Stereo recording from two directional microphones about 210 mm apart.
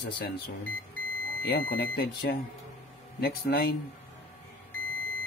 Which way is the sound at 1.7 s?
50° left (ahead or behind).